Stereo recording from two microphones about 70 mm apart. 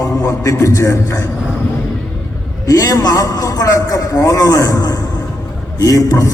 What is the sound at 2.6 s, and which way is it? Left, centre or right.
A man's voice, left.